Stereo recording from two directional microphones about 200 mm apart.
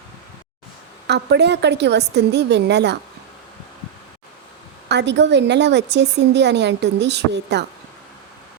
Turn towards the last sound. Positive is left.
turn(degrees=-55)  # may be behind; listen again after turning